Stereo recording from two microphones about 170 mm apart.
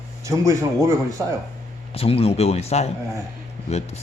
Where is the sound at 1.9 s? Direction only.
35° left (ahead or behind).